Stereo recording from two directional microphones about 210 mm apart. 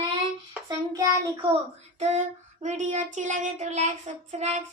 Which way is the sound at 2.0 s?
35° right (ahead or behind).